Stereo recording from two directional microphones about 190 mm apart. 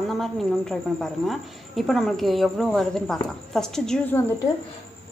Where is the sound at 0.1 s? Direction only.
Centre (ahead or behind).